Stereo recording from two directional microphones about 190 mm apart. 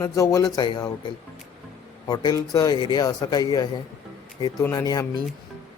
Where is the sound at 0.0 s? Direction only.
15° left (ahead or behind).